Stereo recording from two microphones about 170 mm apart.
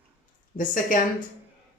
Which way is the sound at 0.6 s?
50° left (ahead or behind).